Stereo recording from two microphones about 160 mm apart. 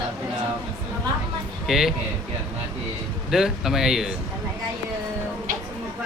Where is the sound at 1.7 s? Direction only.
Centre (ahead or behind).